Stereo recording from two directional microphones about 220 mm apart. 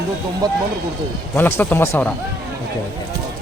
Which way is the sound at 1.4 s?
10° left (ahead or behind).